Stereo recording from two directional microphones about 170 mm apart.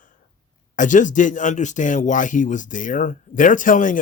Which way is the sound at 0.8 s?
50° left (ahead or behind).